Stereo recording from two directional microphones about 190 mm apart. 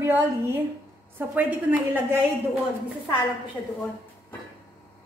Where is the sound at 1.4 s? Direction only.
10° right (ahead or behind).